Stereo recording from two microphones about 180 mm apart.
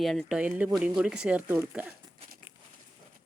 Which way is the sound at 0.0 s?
Centre (ahead or behind).